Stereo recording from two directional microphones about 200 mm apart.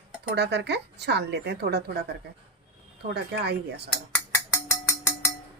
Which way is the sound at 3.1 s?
55° right (ahead or behind).